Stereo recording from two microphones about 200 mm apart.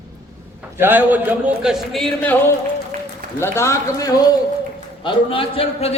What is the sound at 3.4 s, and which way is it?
A man's voice, 15° left (ahead or behind).